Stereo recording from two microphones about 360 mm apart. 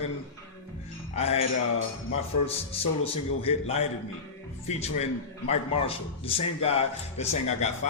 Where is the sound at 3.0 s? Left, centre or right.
Centre.